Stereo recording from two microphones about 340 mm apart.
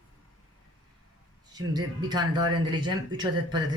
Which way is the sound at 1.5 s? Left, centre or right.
Centre.